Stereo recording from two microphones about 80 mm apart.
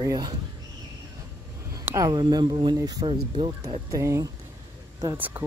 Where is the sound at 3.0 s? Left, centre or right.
Right.